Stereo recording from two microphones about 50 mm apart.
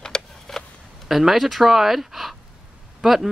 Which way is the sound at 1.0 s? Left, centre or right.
Centre.